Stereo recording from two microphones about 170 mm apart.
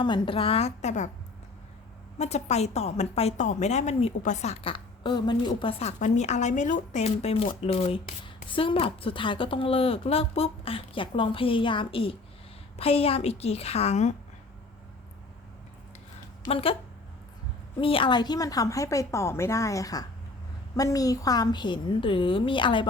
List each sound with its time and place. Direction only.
0.0 s a woman's voice: 30° left (ahead or behind)
2.1 s a woman's voice: 40° left (ahead or behind)
6.0 s a woman's voice: 40° left (ahead or behind)
16.4 s a woman's voice: 35° left (ahead or behind)
17.7 s a woman's voice: 30° left (ahead or behind)